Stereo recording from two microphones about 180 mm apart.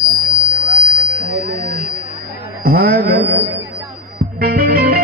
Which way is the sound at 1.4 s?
60° right (ahead or behind).